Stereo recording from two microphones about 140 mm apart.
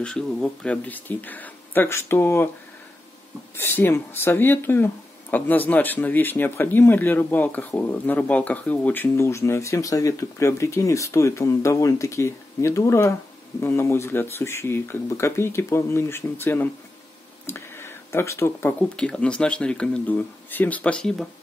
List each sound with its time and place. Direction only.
0.0 s speech: 5° left (ahead or behind)
3.5 s speech: 15° left (ahead or behind)
18.9 s speech: 5° left (ahead or behind)